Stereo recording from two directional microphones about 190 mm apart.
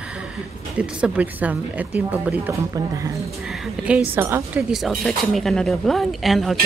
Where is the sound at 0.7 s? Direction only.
5° right (ahead or behind).